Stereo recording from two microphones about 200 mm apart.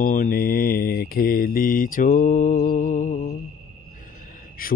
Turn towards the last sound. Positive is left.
turn(degrees=45)  # may be behind; listen again after turning